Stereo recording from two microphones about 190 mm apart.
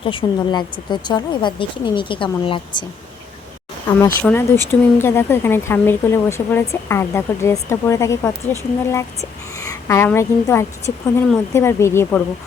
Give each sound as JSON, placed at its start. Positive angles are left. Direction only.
{"t": 0.0, "sound": "speech", "side_deg": 25}
{"t": 3.8, "sound": "speech", "side_deg": 10}
{"t": 9.9, "sound": "speech", "side_deg": 15}